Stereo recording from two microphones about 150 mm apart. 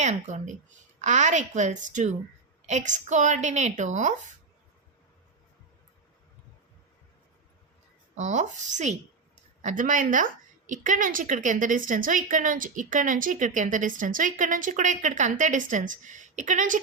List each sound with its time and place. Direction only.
0.0 s a woman's voice: 50° right (ahead or behind)
8.1 s a woman's voice: 50° right (ahead or behind)